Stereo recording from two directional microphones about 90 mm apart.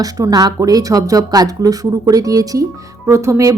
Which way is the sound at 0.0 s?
45° right (ahead or behind).